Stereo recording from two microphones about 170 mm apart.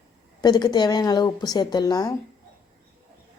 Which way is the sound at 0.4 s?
25° left (ahead or behind).